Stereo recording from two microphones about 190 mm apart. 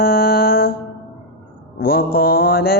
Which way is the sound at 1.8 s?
55° left (ahead or behind).